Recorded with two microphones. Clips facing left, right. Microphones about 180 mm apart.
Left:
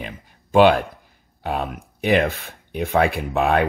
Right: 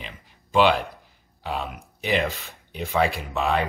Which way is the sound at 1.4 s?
55° left (ahead or behind).